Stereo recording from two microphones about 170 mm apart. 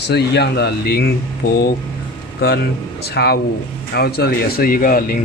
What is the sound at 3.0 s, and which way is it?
Speech, 70° left (ahead or behind).